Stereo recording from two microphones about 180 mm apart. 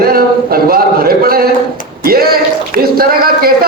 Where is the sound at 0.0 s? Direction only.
55° right (ahead or behind).